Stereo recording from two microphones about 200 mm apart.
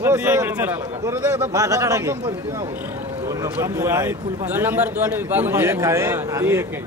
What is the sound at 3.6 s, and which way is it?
A man's voice, 15° right (ahead or behind).